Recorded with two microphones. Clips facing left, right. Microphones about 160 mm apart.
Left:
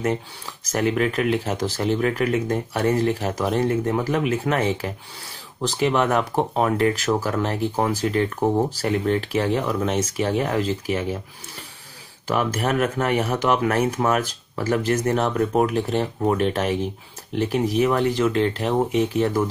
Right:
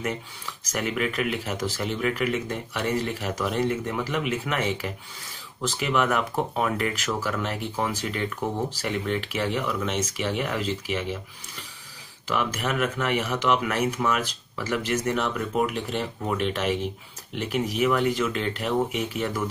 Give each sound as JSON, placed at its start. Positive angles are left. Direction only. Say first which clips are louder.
{"t": 0.7, "sound": "speech", "louder": "left 6 dB", "side_deg": 35}
{"t": 12.3, "sound": "speech", "louder": "left 5 dB", "side_deg": 40}